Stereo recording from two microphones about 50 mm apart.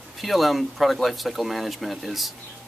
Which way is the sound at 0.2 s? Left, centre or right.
Centre.